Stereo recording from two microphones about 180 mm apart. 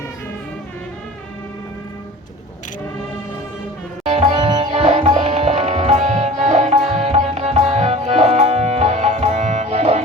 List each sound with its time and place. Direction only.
4.1 s music: 30° right (ahead or behind)